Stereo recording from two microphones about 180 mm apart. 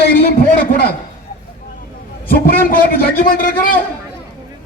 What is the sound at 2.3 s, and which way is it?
A man's voice, 55° left (ahead or behind).